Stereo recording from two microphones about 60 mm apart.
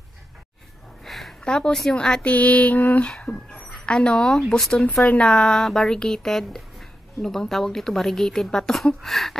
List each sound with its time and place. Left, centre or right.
1.0 s a sound: centre
1.4 s speech: centre
2.2 s mantra: left
3.8 s speech: centre
5.0 s mantra: left
5.3 s speech: centre